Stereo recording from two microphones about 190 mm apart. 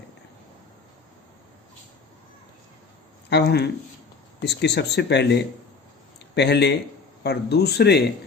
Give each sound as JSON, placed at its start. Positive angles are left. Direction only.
{"t": 3.2, "sound": "speech", "side_deg": 60}